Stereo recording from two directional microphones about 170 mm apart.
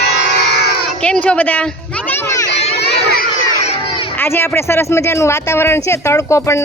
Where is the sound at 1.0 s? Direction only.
5° left (ahead or behind).